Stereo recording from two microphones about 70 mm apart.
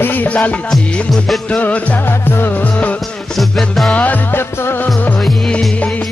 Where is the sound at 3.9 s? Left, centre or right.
Left.